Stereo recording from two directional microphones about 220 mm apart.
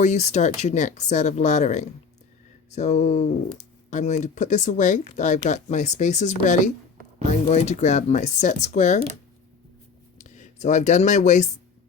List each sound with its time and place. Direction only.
0.0 s speech: 30° left (ahead or behind)
10.2 s speech: 30° left (ahead or behind)